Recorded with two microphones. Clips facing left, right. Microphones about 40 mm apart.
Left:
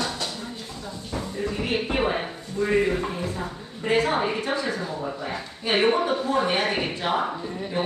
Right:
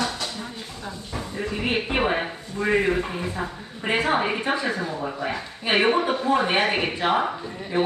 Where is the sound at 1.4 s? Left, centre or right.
Right.